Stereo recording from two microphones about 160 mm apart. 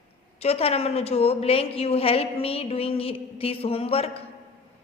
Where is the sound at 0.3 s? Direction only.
40° left (ahead or behind).